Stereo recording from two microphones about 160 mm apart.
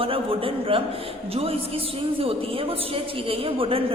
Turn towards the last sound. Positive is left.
turn(degrees=-35)  # may be behind; listen again after turning